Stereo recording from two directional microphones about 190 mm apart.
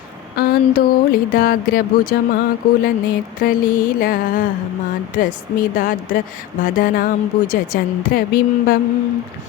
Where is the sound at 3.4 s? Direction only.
45° left (ahead or behind).